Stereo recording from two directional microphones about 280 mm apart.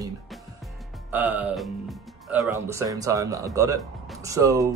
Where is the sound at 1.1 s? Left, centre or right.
Centre.